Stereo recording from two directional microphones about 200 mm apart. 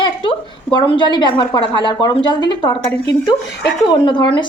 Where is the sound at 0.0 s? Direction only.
25° left (ahead or behind).